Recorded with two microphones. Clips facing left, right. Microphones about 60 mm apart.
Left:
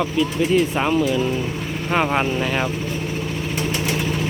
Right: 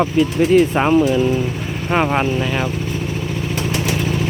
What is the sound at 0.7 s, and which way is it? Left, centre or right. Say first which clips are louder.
Speech: right 5 dB; right.